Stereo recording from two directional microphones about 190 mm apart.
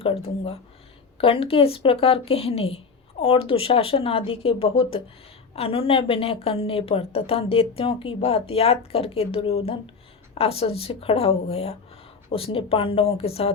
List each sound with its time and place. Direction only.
0.0 s speech: 30° left (ahead or behind)